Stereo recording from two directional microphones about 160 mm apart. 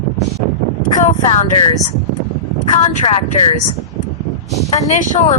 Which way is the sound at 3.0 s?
35° left (ahead or behind).